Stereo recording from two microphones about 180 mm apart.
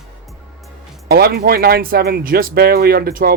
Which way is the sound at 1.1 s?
60° right (ahead or behind).